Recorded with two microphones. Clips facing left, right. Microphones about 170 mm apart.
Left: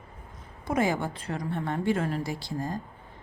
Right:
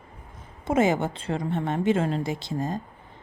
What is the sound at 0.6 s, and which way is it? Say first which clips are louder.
A woman's voice: right 4 dB; 25° right (ahead or behind).